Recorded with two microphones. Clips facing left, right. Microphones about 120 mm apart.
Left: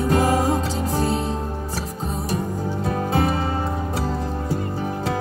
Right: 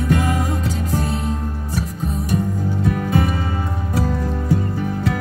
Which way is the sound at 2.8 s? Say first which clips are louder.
Right 1 dB; 30° left (ahead or behind).